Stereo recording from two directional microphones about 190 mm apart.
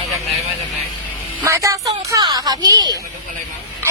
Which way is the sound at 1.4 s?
15° right (ahead or behind).